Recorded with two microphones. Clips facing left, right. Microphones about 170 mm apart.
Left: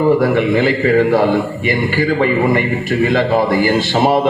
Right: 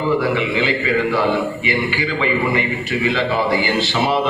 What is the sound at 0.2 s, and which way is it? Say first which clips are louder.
A man's voice: left 6 dB; 45° left (ahead or behind).